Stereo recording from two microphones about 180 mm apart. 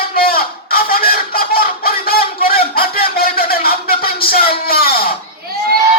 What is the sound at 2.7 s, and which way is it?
Music, 55° left (ahead or behind).